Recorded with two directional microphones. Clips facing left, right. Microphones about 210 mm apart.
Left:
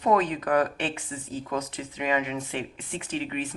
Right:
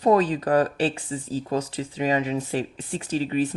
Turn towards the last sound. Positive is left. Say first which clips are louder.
# right 7 dB
turn(degrees=-35)  # may be behind; listen again after turning